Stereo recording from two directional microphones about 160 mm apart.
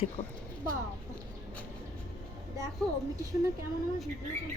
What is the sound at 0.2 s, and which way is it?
Speech, 30° left (ahead or behind).